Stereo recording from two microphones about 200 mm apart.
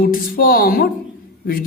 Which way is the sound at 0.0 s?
45° left (ahead or behind).